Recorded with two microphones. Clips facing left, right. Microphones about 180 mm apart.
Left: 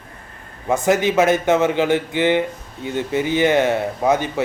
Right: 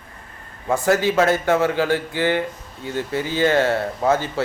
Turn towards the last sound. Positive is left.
turn(degrees=20)  # may be behind; listen again after turning